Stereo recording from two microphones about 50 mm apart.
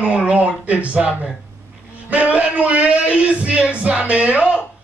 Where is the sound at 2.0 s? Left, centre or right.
Right.